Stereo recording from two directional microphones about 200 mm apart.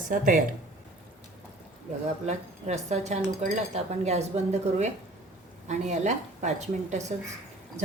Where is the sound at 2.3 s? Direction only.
35° right (ahead or behind).